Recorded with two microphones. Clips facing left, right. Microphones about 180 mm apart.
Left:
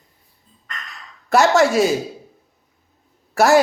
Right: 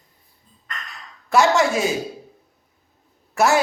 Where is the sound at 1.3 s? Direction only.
70° left (ahead or behind).